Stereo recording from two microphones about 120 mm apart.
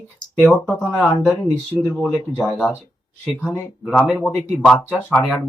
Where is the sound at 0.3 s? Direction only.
15° left (ahead or behind).